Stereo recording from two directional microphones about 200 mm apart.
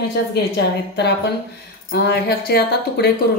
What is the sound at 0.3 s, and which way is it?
A woman's voice, 55° left (ahead or behind).